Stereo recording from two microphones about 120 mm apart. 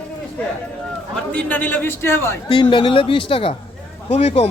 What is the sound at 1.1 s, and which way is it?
A man's voice, 10° left (ahead or behind).